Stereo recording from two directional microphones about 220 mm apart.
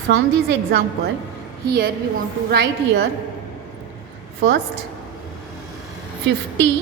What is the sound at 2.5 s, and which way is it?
Speech, 50° right (ahead or behind).